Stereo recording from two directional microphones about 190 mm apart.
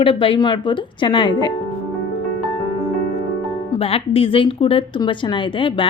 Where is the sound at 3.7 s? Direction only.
30° left (ahead or behind).